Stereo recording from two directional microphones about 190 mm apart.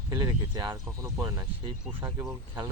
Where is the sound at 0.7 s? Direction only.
15° right (ahead or behind).